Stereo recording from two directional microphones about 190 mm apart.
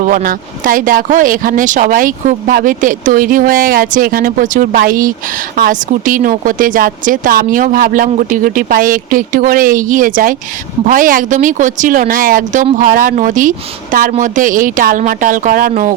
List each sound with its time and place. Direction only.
0.0 s speech: 45° right (ahead or behind)